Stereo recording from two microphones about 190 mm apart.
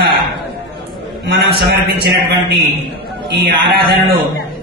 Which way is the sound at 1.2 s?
55° right (ahead or behind).